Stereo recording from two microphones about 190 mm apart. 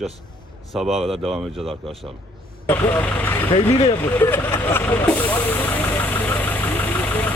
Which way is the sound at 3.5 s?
30° left (ahead or behind).